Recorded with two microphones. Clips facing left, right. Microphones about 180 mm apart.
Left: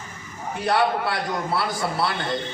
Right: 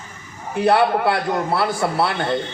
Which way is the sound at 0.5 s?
60° right (ahead or behind).